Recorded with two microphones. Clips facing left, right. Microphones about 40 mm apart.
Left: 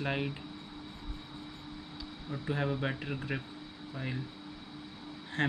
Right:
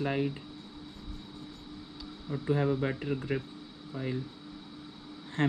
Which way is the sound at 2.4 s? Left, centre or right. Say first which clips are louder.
Right 4 dB; left.